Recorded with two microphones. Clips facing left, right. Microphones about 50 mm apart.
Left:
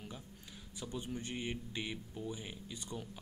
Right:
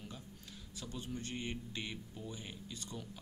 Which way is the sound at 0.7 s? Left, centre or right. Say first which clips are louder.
Left 2 dB; centre.